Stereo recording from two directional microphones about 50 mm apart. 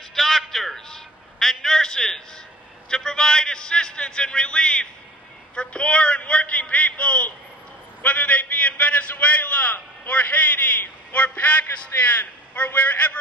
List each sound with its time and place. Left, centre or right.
0.1 s a man's voice: centre; by 13.2 s left